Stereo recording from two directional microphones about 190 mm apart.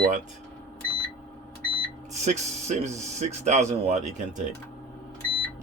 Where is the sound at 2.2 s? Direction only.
40° right (ahead or behind).